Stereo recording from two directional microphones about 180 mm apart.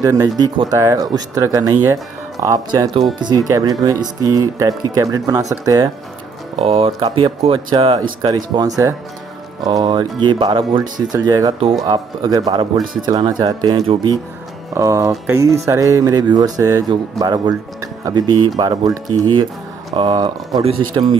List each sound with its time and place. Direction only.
0.0 s speech: 20° right (ahead or behind)
6.6 s speech: 30° right (ahead or behind)